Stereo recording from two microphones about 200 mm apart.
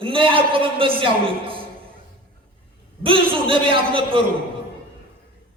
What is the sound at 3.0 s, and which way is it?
A man's voice, 25° right (ahead or behind).